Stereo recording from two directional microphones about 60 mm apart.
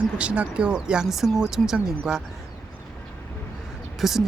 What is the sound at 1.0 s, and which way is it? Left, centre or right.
Speech, centre.